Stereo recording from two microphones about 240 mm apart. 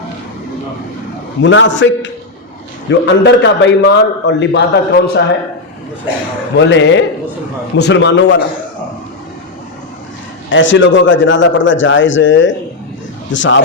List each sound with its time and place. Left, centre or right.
1.4 s a man's voice: left
6.6 s a man's voice: left
10.5 s a man's voice: left